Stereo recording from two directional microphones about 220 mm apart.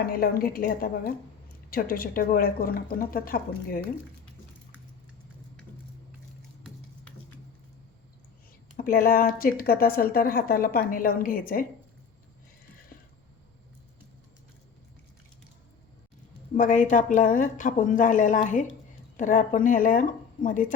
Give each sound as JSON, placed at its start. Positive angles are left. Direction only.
{"t": 0.0, "sound": "speech", "side_deg": 40}
{"t": 8.7, "sound": "speech", "side_deg": 40}
{"t": 16.6, "sound": "speech", "side_deg": 35}